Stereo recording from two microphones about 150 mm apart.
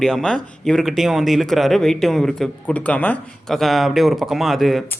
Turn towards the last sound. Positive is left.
turn(degrees=0)  # may be behind; listen again after turning